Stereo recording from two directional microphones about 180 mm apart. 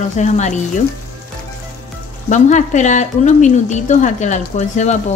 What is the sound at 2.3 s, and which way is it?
Speech, 40° left (ahead or behind).